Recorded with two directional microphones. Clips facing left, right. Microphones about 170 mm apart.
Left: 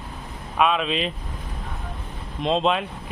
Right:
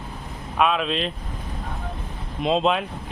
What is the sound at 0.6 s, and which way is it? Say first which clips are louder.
Speech: even; centre (ahead or behind).